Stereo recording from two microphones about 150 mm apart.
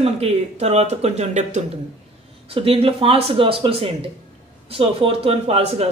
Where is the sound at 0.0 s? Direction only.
45° right (ahead or behind).